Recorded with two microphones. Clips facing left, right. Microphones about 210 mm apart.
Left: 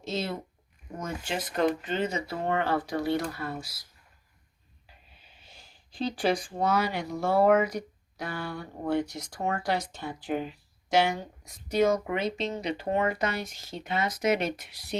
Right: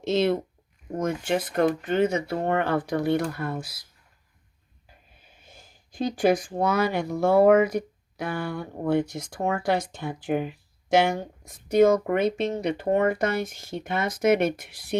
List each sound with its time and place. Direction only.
0.9 s speech: 55° right (ahead or behind)
4.9 s speech: 50° right (ahead or behind)